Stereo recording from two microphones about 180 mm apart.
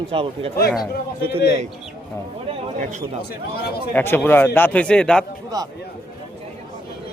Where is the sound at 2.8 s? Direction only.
40° right (ahead or behind).